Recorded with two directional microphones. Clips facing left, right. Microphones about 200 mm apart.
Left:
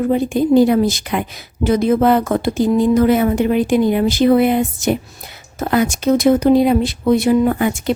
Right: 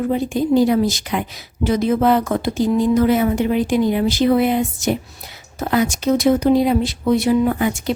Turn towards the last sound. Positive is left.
turn(degrees=55)  # may be behind; listen again after turning